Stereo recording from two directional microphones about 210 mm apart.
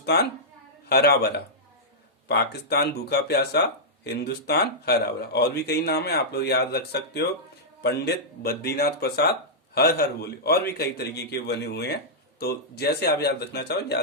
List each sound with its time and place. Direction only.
0.0 s a woman's voice: 50° left (ahead or behind)